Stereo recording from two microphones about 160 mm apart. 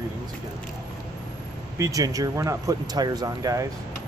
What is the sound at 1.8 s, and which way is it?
Speech, 20° right (ahead or behind).